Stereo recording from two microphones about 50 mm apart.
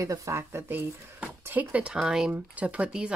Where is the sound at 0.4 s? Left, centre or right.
Right.